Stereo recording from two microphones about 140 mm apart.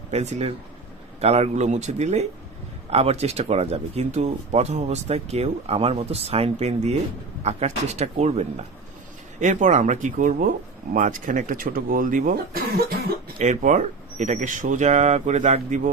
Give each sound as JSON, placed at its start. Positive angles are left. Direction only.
{"t": 0.1, "sound": "speech", "side_deg": -50}
{"t": 9.4, "sound": "speech", "side_deg": -60}
{"t": 13.4, "sound": "speech", "side_deg": -60}